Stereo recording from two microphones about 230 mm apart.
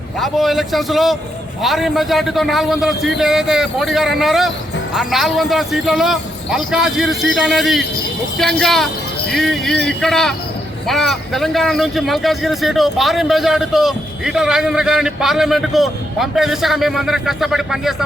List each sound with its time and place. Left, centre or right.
0.2 s a man's voice: centre